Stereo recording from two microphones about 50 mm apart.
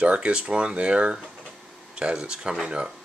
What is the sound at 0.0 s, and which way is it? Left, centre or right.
Speech, right.